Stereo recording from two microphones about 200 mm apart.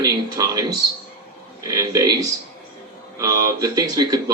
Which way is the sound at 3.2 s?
15° right (ahead or behind).